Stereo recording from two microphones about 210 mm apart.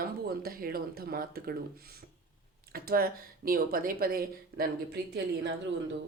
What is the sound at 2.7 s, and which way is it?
Speech, 45° right (ahead or behind).